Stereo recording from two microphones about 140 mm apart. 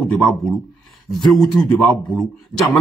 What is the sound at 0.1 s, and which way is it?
Speech, centre (ahead or behind).